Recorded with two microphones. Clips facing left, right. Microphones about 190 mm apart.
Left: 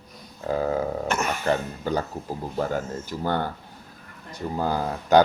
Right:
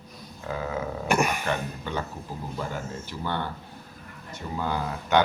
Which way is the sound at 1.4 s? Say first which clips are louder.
Left 5 dB; 35° left (ahead or behind).